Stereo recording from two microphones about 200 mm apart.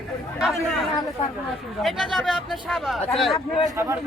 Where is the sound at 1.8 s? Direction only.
Centre (ahead or behind).